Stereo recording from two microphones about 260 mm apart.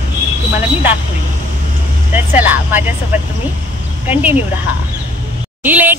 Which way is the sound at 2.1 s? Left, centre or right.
Centre.